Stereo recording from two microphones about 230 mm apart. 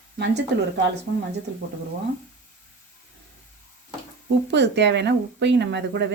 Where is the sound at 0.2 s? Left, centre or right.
Right.